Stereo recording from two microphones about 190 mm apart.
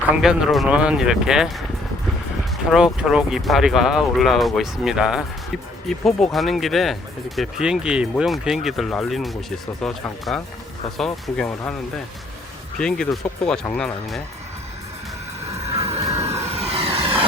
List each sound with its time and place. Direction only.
0.0 s speech: 5° right (ahead or behind)
12.8 s speech: 5° left (ahead or behind)
15.7 s music: 35° right (ahead or behind)
16.5 s vehicle: 30° right (ahead or behind)